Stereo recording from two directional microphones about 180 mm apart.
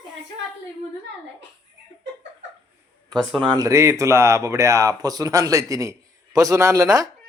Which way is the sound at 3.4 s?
25° right (ahead or behind).